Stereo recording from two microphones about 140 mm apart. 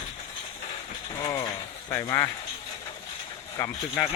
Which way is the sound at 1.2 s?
25° left (ahead or behind).